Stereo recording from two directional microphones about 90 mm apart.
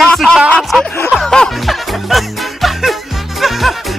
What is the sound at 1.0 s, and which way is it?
Music, 5° left (ahead or behind).